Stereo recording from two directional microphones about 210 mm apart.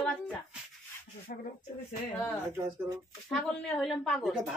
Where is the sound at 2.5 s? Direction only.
15° right (ahead or behind).